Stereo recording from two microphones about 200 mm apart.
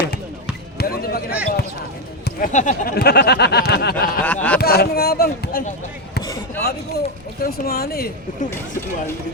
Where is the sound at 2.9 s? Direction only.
55° left (ahead or behind).